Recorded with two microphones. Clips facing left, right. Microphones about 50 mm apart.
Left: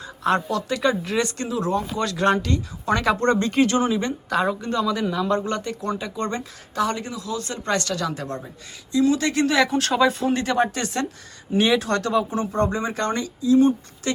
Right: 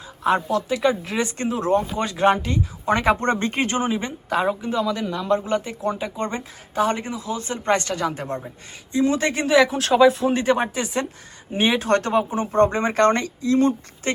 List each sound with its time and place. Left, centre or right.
0.0 s a woman's voice: centre
1.5 s speech: right
1.8 s speech: right
9.4 s a woman's voice: centre
10.3 s speech: centre
11.9 s speech: right